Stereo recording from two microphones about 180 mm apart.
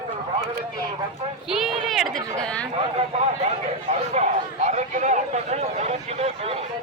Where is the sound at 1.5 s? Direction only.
Centre (ahead or behind).